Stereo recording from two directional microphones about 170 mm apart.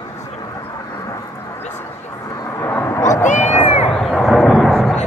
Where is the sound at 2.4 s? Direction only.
15° left (ahead or behind).